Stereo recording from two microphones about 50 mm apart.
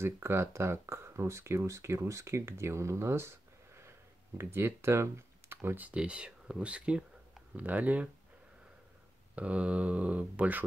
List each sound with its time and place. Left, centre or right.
0.0 s speech: right
5.9 s speech: right
7.5 s speech: right
9.3 s speech: right